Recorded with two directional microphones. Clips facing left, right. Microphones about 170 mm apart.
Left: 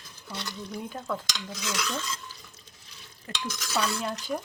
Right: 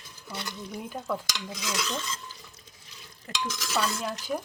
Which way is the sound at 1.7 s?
25° right (ahead or behind).